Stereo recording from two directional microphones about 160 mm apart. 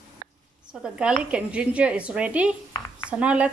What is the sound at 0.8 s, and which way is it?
Speech, 5° right (ahead or behind).